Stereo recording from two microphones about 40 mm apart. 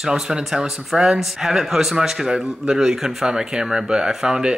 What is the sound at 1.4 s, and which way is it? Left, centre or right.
Speech, centre.